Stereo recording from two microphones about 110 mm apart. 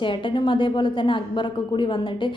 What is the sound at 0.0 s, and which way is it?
A woman's voice, 50° left (ahead or behind).